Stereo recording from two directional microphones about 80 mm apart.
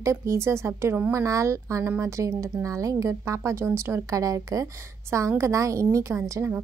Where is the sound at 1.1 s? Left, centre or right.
Right.